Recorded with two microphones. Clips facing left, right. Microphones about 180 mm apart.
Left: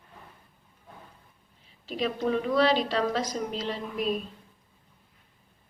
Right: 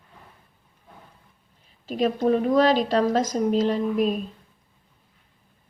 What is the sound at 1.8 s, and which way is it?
A woman's voice, 45° right (ahead or behind).